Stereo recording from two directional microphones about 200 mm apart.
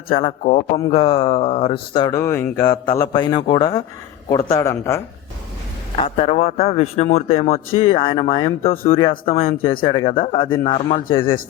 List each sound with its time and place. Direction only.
0.2 s speech: 30° left (ahead or behind); by 5.0 s 15° left (ahead or behind)
6.0 s a man's voice: 35° left (ahead or behind)